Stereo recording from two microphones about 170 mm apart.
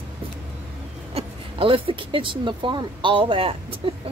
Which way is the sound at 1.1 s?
30° right (ahead or behind).